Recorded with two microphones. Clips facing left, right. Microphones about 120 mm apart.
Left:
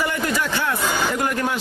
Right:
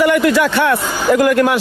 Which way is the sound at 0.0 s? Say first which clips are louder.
Right 11 dB; 75° right (ahead or behind).